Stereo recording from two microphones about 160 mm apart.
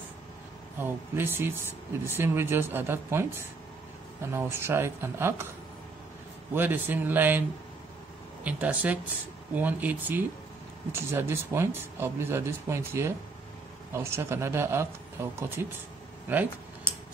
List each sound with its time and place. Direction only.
0.7 s speech: 15° right (ahead or behind)
6.5 s speech: 10° right (ahead or behind)
8.5 s speech: 10° right (ahead or behind)